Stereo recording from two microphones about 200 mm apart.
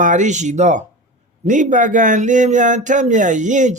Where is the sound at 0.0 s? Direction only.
40° right (ahead or behind).